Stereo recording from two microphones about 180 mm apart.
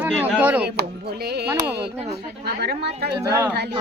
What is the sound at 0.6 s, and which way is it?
Speech, 60° right (ahead or behind).